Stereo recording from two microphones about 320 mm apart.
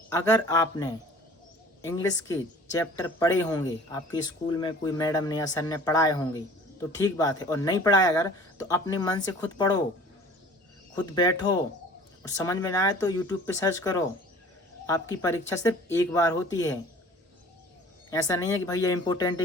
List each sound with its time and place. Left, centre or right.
0.1 s speech: centre
10.9 s speech: centre
18.1 s speech: centre